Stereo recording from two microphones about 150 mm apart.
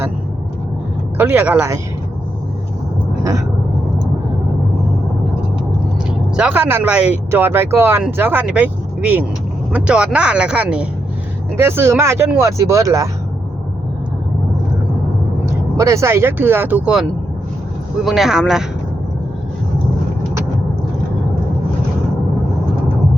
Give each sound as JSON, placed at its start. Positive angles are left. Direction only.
{"t": 1.2, "sound": "speech", "side_deg": -15}
{"t": 6.3, "sound": "speech", "side_deg": -10}
{"t": 15.4, "sound": "speech", "side_deg": -20}